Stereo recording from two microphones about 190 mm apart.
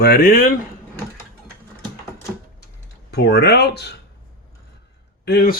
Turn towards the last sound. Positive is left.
turn(degrees=55)  # may be behind; listen again after turning